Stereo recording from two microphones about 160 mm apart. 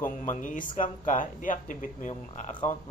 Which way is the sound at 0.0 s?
55° left (ahead or behind).